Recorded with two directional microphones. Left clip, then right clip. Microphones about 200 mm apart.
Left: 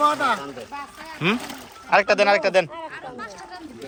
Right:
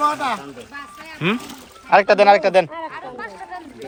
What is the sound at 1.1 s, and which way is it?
Speech, 10° left (ahead or behind).